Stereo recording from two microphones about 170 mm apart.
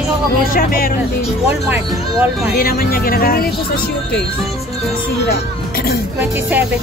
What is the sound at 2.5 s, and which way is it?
Speech, 60° left (ahead or behind).